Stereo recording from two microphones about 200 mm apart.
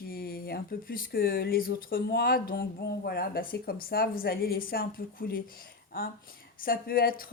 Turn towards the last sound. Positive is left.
turn(degrees=50)  # may be behind; listen again after turning